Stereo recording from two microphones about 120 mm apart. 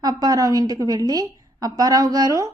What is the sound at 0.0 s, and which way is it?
A woman's voice, 30° right (ahead or behind).